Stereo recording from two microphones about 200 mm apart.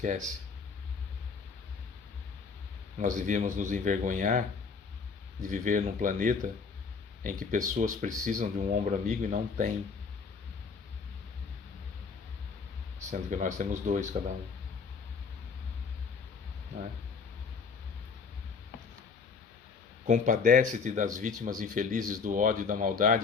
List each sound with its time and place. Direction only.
3.0 s speech: 40° right (ahead or behind)
13.1 s speech: 35° right (ahead or behind)
20.1 s speech: 40° right (ahead or behind)